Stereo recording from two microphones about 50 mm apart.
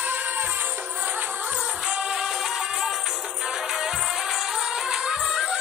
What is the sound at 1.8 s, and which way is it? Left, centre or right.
Music, centre.